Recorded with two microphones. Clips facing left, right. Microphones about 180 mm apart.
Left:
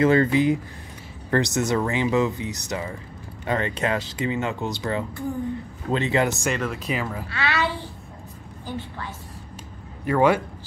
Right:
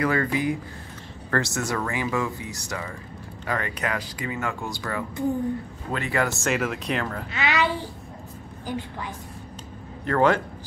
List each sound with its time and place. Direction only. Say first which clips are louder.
0.0 s speech: left 6 dB; 25° left (ahead or behind)
6.5 s speech: right 1 dB; centre (ahead or behind)
7.2 s a child's voice: right 2 dB; 20° right (ahead or behind)
10.0 s a man's voice: left 1 dB; 10° left (ahead or behind)